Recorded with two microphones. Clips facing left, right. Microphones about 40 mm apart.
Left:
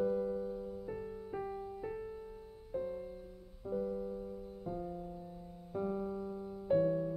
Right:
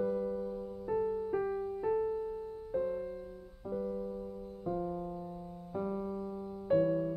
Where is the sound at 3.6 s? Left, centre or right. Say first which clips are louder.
Right 1 dB; centre.